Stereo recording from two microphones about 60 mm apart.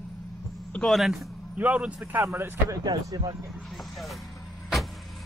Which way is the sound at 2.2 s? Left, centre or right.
Right.